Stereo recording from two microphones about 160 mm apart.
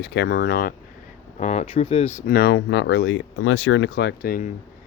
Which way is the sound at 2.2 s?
70° left (ahead or behind).